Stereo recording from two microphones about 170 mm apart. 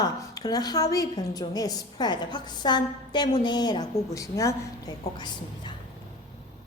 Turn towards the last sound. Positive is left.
turn(degrees=25)  # may be behind; listen again after turning